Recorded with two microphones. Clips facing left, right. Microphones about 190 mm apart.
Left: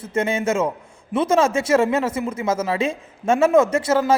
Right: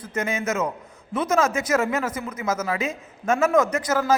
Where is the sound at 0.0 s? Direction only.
30° left (ahead or behind).